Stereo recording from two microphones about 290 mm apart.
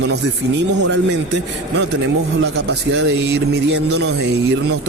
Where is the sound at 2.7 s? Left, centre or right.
Right.